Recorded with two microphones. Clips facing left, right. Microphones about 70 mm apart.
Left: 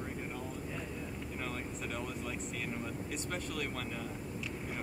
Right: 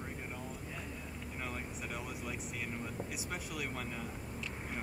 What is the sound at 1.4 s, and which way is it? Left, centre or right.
Speech, centre.